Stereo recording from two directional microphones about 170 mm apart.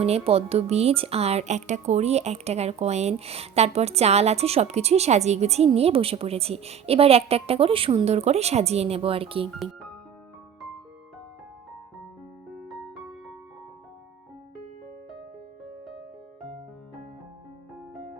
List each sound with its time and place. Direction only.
0.0 s speech: 35° right (ahead or behind)
12.5 s music: centre (ahead or behind)